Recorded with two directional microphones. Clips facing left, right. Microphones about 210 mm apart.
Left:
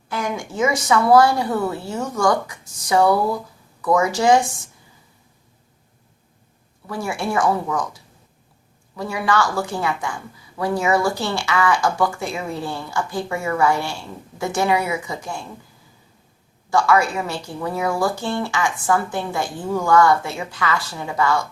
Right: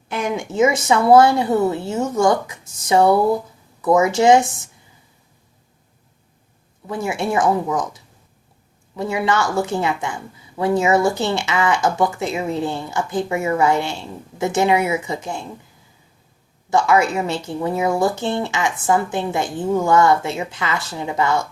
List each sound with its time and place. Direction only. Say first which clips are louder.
0.1 s speech: right 3 dB; 20° right (ahead or behind)
6.8 s speech: right 2 dB; 20° right (ahead or behind)
9.0 s speech: right 1 dB; 25° right (ahead or behind)
16.6 s speech: right 1 dB; 20° right (ahead or behind)